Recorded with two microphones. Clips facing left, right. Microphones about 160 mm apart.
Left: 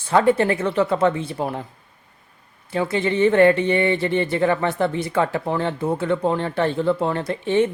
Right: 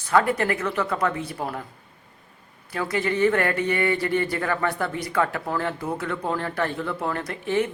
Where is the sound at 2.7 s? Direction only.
25° left (ahead or behind).